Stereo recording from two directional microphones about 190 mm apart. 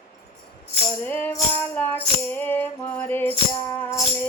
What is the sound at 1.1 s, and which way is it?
Music, 10° left (ahead or behind).